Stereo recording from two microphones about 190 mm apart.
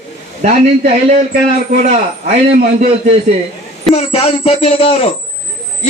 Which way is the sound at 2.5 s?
40° right (ahead or behind).